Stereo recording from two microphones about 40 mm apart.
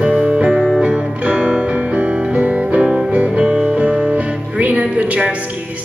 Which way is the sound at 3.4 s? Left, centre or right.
Centre.